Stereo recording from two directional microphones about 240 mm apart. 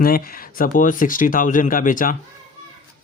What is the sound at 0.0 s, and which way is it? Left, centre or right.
Speech, left.